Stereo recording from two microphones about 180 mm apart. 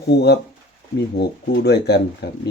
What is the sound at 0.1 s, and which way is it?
Speech, 70° left (ahead or behind).